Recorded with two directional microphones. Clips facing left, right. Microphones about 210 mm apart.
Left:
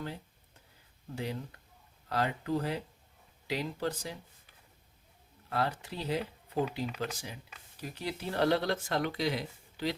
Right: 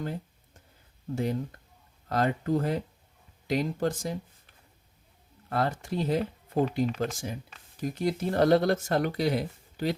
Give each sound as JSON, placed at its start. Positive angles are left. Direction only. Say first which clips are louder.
{"t": 1.1, "sound": "speech", "louder": "right 8 dB", "side_deg": -45}
{"t": 5.5, "sound": "speech", "louder": "right 4 dB", "side_deg": -50}